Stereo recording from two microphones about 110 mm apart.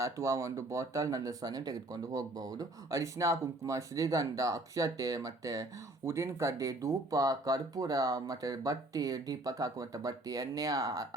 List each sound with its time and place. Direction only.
0.0 s speech: 30° right (ahead or behind)